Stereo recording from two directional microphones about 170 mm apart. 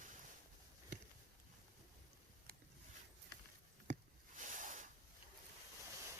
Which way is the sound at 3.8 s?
45° right (ahead or behind).